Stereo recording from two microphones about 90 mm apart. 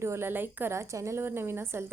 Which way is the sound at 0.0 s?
30° right (ahead or behind).